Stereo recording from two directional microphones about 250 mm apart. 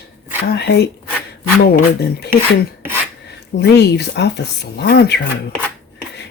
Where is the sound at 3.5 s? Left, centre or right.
Left.